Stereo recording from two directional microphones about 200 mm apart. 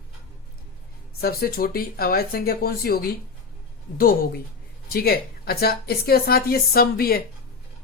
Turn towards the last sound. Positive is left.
turn(degrees=50)  # may be behind; listen again after turning